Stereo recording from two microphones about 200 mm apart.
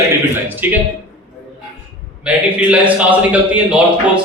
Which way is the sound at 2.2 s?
5° right (ahead or behind).